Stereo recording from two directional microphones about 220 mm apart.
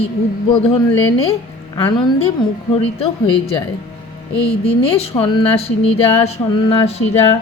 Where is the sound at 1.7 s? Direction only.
20° left (ahead or behind).